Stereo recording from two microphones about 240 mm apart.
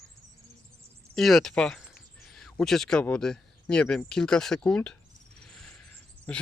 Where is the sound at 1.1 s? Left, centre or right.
Centre.